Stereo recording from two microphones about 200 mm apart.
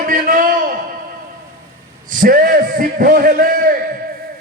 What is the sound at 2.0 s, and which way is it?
A man's voice, 40° right (ahead or behind).